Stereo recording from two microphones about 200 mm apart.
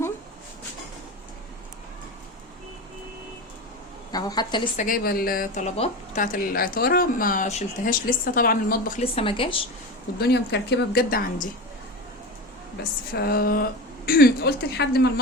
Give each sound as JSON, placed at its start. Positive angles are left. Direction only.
{"t": 4.1, "sound": "a woman's voice", "side_deg": 20}
{"t": 4.8, "sound": "a woman's voice", "side_deg": 45}
{"t": 9.0, "sound": "a woman's voice", "side_deg": 30}
{"t": 10.2, "sound": "a woman's voice", "side_deg": 55}
{"t": 13.1, "sound": "a woman's voice", "side_deg": 50}